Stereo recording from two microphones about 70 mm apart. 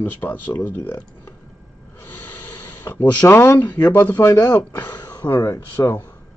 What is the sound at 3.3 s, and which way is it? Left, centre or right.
Speech, left.